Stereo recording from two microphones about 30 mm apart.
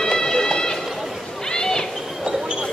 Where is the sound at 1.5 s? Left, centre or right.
Left.